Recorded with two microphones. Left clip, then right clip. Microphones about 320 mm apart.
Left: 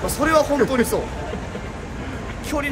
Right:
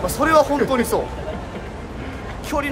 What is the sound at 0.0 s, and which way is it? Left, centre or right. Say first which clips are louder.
Speech: right 2 dB; centre.